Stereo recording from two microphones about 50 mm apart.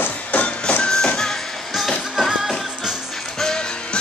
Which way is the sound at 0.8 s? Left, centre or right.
Centre.